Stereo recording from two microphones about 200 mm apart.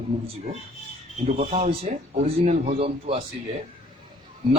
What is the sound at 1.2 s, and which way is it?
Mantra, 35° right (ahead or behind).